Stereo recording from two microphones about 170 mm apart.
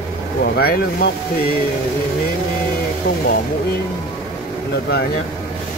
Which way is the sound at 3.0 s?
60° left (ahead or behind).